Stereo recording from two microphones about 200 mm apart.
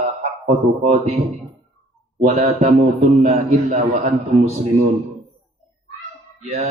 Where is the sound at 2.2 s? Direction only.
35° right (ahead or behind).